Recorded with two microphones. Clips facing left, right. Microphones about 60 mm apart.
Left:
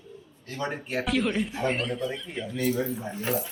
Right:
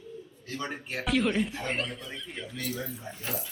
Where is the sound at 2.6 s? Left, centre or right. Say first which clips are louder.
Left 10 dB; left.